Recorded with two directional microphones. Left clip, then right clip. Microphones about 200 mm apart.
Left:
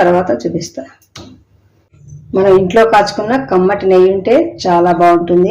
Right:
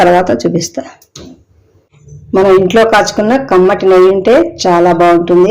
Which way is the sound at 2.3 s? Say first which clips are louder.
Right 2 dB; 30° right (ahead or behind).